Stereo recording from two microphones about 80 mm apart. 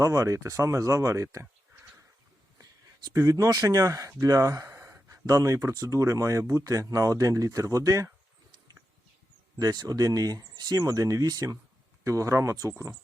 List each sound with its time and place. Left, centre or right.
0.0 s speech: right
3.1 s speech: right
9.6 s speech: right